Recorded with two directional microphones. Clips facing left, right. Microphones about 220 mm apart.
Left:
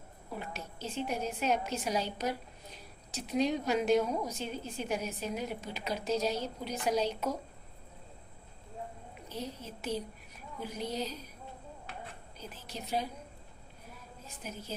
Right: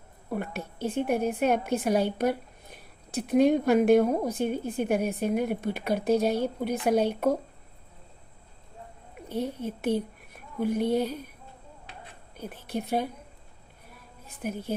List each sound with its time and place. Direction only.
0.3 s a woman's voice: 55° right (ahead or behind)
9.3 s a woman's voice: 55° right (ahead or behind)
12.4 s a woman's voice: 55° right (ahead or behind)
14.3 s a woman's voice: 55° right (ahead or behind)